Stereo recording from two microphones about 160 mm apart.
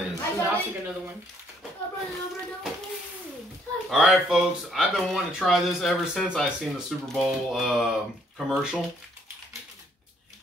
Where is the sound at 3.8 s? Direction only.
Centre (ahead or behind).